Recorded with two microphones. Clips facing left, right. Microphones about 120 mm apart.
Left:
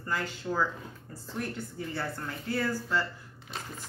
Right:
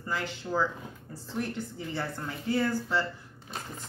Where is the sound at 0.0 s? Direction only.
15° right (ahead or behind).